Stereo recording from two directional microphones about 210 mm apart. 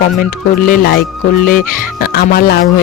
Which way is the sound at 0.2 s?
45° left (ahead or behind).